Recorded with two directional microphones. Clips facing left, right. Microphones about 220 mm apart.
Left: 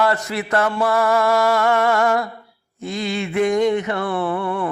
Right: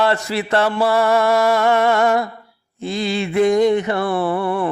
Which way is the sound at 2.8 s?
30° right (ahead or behind).